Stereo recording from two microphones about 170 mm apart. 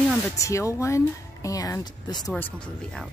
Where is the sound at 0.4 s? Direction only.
20° left (ahead or behind).